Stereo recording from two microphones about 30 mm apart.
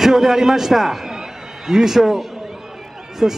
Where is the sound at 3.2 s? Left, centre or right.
Right.